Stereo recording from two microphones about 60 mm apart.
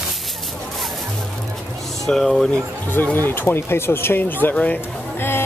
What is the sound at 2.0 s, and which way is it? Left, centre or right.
Speech, centre.